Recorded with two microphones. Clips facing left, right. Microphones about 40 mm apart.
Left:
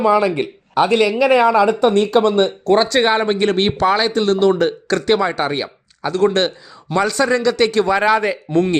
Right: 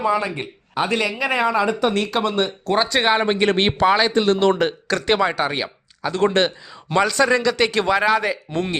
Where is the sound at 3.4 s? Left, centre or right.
Right.